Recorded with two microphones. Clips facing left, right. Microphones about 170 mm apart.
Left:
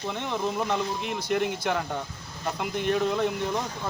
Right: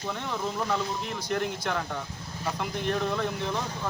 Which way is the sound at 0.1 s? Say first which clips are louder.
Left 3 dB; 15° left (ahead or behind).